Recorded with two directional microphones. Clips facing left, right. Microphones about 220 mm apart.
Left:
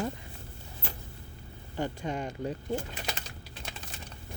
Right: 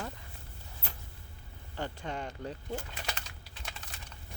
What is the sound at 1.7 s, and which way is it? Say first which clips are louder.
Speech: left 5 dB; 15° left (ahead or behind).